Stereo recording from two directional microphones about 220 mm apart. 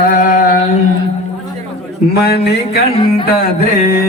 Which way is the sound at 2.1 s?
45° left (ahead or behind).